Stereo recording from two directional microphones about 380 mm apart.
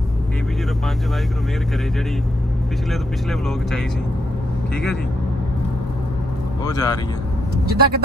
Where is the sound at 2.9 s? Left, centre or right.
Centre.